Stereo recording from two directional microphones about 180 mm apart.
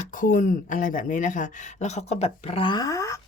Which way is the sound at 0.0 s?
45° left (ahead or behind).